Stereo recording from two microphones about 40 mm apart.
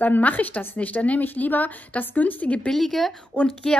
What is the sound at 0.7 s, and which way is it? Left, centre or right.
A woman's voice, left.